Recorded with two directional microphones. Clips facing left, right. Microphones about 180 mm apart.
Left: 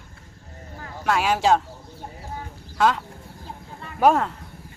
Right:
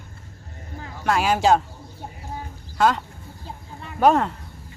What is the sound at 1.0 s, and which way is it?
Speech, centre (ahead or behind).